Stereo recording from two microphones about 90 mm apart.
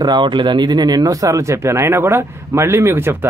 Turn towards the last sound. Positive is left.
turn(degrees=-25)  # may be behind; listen again after turning